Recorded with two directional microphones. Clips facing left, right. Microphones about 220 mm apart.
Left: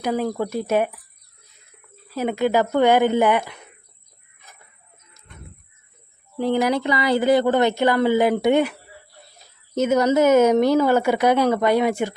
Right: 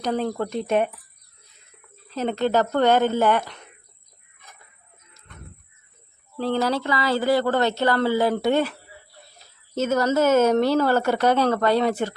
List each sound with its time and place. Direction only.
0.0 s speech: 10° left (ahead or behind)
2.0 s speech: 10° left (ahead or behind)
6.3 s speech: 15° left (ahead or behind)